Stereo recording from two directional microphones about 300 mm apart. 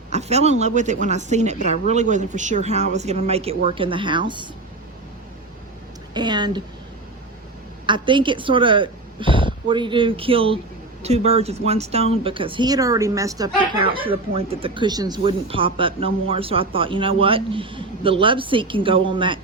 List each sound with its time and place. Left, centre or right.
0.1 s a woman's voice: right
6.1 s speech: centre
7.9 s speech: centre